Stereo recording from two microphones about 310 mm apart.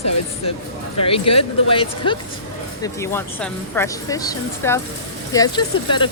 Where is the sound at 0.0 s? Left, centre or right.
Left.